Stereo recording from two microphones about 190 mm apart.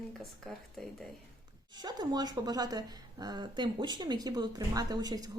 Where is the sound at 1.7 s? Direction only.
20° right (ahead or behind).